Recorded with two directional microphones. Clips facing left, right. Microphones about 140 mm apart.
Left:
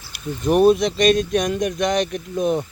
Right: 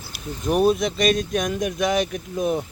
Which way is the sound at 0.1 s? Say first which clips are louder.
Left 4 dB; centre (ahead or behind).